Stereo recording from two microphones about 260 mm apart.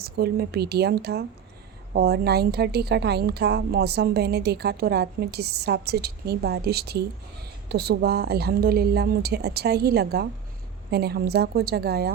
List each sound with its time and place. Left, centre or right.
0.0 s a woman's voice: right